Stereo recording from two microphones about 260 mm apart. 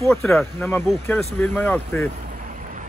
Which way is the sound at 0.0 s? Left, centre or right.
Centre.